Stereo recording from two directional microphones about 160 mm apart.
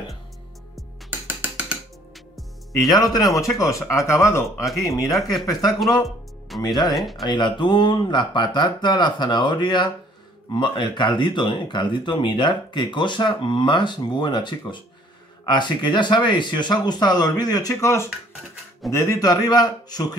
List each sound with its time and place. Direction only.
1.2 s music: 10° right (ahead or behind)
2.9 s speech: 25° left (ahead or behind)
7.0 s speech: centre (ahead or behind)
7.2 s speech: 30° left (ahead or behind)